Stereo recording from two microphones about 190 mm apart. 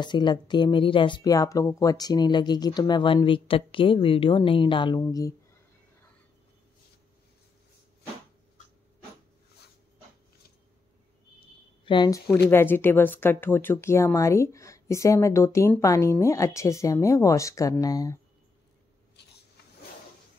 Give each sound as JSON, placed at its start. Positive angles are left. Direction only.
{"t": 0.0, "sound": "speech", "side_deg": 25}
{"t": 11.8, "sound": "speech", "side_deg": 25}
{"t": 19.2, "sound": "vehicle", "side_deg": 60}